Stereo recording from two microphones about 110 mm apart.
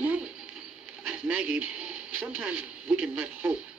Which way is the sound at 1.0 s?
10° right (ahead or behind).